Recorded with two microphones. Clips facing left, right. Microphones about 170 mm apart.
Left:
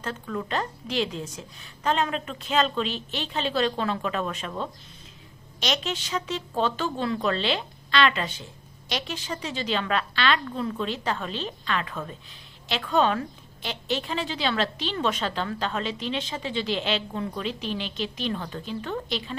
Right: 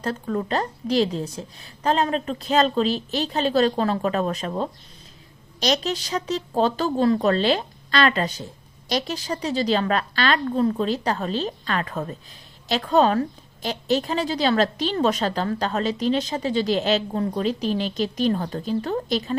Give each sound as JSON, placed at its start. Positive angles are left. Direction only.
{"t": 0.0, "sound": "a woman's voice", "side_deg": -40}